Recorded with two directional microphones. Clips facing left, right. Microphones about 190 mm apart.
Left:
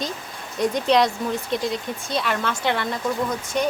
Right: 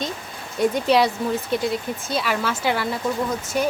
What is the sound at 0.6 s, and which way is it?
A woman's voice, 5° right (ahead or behind).